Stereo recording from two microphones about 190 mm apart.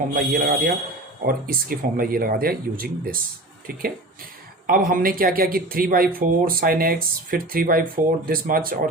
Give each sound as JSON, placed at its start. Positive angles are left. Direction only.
{"t": 0.1, "sound": "speech", "side_deg": -50}